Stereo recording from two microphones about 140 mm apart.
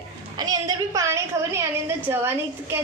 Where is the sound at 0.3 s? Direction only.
25° right (ahead or behind).